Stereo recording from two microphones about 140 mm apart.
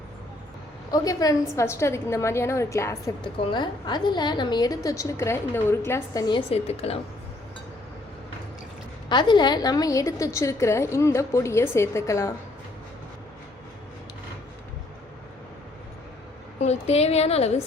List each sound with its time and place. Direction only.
0.9 s a woman's voice: 25° left (ahead or behind)
3.3 s a woman's voice: 35° left (ahead or behind); by 6.2 s 15° left (ahead or behind)
6.2 s a woman's voice: 40° left (ahead or behind)
9.0 s a woman's voice: 35° left (ahead or behind)
16.6 s a woman's voice: 50° left (ahead or behind)